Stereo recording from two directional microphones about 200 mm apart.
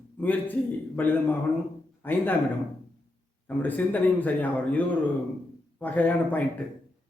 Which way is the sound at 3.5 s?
10° left (ahead or behind).